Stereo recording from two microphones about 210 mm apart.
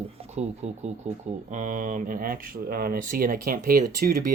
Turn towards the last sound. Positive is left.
turn(degrees=-45)  # may be behind; listen again after turning